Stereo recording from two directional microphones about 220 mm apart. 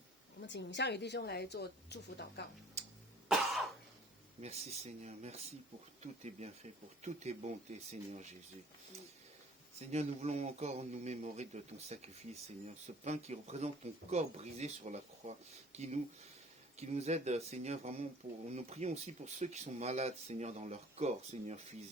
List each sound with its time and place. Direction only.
0.4 s a woman's voice: 55° left (ahead or behind)
2.8 s cough: 30° right (ahead or behind)
3.2 s cough: centre (ahead or behind)
4.4 s speech: 30° right (ahead or behind)
9.7 s speech: 30° right (ahead or behind)